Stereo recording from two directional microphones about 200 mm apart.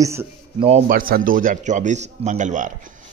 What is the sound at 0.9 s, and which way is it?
A man's voice, 45° right (ahead or behind).